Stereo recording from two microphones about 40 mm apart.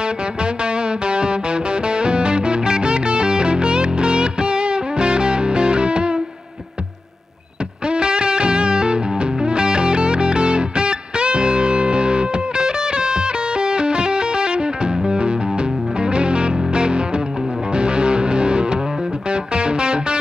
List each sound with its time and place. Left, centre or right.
0.0 s music: right
7.8 s music: right